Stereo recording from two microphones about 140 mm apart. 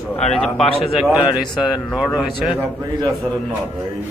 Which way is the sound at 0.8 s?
Centre (ahead or behind).